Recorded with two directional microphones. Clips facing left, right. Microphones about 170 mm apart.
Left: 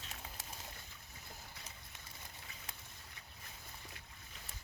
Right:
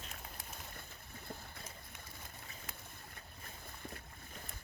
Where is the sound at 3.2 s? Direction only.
50° right (ahead or behind).